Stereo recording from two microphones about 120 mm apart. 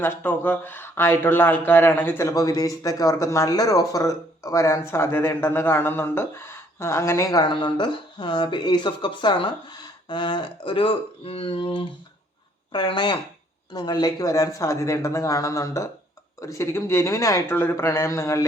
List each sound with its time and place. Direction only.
0.0 s speech: 20° left (ahead or behind)